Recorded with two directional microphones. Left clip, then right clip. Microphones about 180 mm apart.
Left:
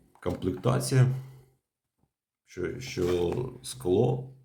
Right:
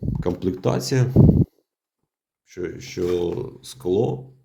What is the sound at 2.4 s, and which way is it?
Speech, 25° right (ahead or behind).